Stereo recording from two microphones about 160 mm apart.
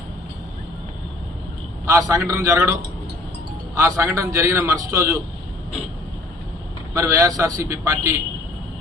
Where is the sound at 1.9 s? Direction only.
20° right (ahead or behind).